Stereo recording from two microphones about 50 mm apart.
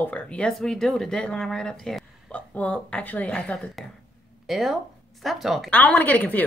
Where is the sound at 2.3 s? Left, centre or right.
Left.